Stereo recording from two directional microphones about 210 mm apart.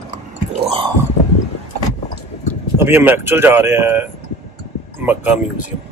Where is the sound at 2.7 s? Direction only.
10° right (ahead or behind).